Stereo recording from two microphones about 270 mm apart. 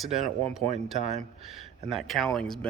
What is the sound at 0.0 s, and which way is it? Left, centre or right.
Speech, centre.